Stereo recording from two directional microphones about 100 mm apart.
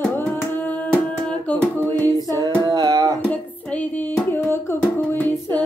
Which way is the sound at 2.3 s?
40° right (ahead or behind).